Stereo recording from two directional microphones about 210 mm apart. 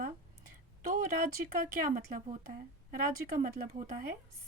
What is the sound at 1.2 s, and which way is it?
A woman's voice, 40° right (ahead or behind).